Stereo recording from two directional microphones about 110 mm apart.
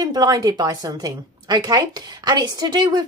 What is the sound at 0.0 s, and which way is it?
A woman's voice, 35° right (ahead or behind).